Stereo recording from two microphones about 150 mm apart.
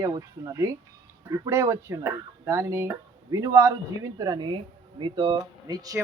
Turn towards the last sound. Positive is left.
turn(degrees=-25)  # may be behind; listen again after turning